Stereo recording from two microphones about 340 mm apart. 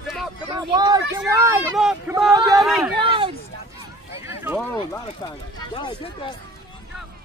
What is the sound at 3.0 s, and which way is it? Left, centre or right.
Speech, centre.